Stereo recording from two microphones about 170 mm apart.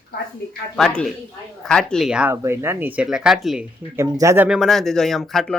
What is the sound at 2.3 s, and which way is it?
Speech, 15° right (ahead or behind).